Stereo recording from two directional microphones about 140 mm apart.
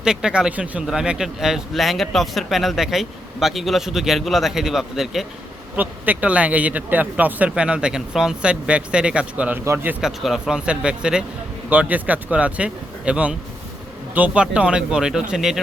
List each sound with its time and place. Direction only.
0.0 s speech: 5° right (ahead or behind)